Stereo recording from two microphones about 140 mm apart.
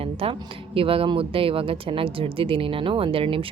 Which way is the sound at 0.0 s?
40° right (ahead or behind).